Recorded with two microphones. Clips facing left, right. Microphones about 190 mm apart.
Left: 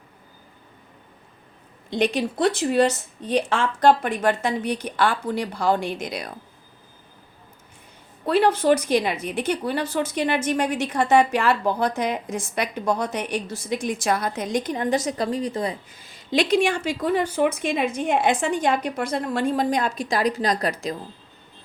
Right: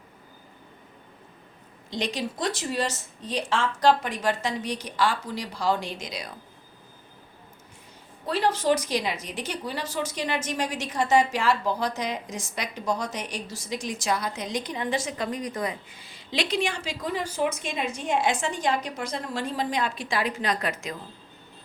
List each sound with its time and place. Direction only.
1.9 s a woman's voice: 55° left (ahead or behind)
8.3 s a woman's voice: 55° left (ahead or behind); by 20.9 s 35° left (ahead or behind)